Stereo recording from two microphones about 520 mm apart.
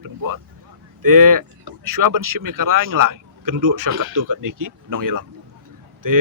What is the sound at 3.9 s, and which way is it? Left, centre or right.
Speech, right.